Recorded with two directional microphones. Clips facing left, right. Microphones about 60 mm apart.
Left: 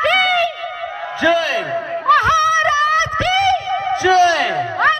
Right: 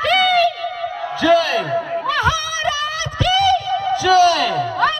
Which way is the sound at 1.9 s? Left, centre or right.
Left.